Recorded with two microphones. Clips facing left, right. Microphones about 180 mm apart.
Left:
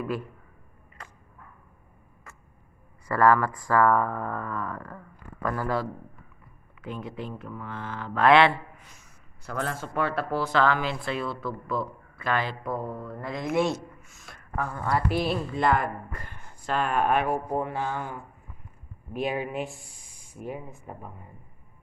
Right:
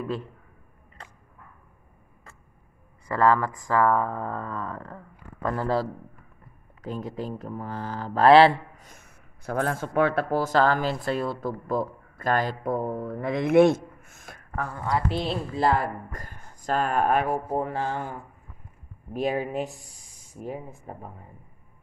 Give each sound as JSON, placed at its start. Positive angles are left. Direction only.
{"t": 0.0, "sound": "speech", "side_deg": -25}
{"t": 3.1, "sound": "speech", "side_deg": -20}
{"t": 14.9, "sound": "a woman's voice", "side_deg": -25}
{"t": 19.1, "sound": "a woman's voice", "side_deg": -40}